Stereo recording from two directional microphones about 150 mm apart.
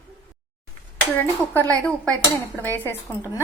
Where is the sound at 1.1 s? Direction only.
10° left (ahead or behind).